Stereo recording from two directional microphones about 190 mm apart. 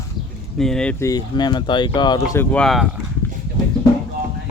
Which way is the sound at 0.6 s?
5° left (ahead or behind).